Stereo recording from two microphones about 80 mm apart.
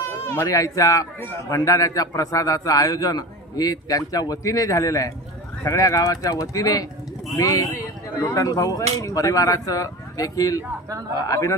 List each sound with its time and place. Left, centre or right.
0.5 s a man's voice: left